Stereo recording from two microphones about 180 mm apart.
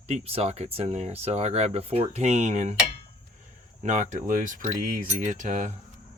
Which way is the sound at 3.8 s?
40° right (ahead or behind).